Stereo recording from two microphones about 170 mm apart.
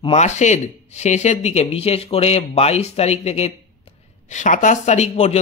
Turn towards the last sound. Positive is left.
turn(degrees=40)  # may be behind; listen again after turning